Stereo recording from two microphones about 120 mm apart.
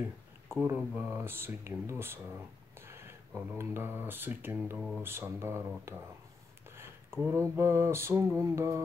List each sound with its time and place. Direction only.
0.5 s speech: 20° right (ahead or behind)
0.7 s mantra: 15° right (ahead or behind)
2.9 s speech: 20° right (ahead or behind)
4.7 s speech: 5° right (ahead or behind)
5.0 s mantra: 20° right (ahead or behind)
7.3 s mantra: 20° right (ahead or behind)